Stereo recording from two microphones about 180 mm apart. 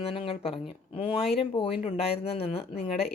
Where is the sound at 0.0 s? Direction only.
30° left (ahead or behind).